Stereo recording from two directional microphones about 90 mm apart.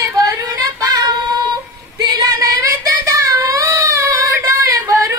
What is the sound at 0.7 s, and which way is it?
Female singing, 45° right (ahead or behind).